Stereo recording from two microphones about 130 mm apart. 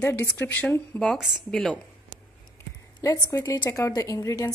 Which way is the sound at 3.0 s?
25° left (ahead or behind).